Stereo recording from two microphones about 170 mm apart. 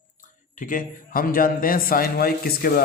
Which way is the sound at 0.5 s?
50° left (ahead or behind).